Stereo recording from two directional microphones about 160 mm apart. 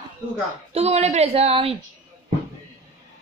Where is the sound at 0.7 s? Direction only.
40° right (ahead or behind).